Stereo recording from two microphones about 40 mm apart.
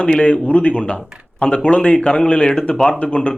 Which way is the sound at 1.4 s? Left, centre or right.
Left.